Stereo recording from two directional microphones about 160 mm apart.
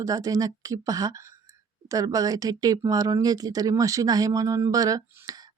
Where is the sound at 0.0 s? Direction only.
20° right (ahead or behind).